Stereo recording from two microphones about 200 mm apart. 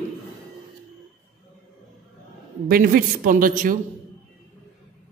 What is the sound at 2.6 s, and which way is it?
A man's voice, 45° right (ahead or behind).